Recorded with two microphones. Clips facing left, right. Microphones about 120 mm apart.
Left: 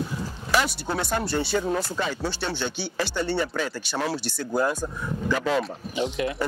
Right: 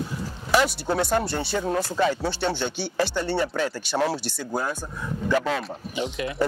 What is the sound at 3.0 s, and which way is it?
Speech, 35° right (ahead or behind).